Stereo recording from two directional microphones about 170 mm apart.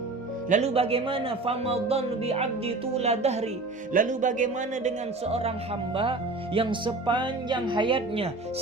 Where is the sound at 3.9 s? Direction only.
50° right (ahead or behind).